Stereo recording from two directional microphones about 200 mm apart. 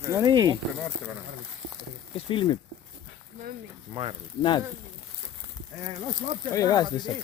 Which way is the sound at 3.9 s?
30° right (ahead or behind).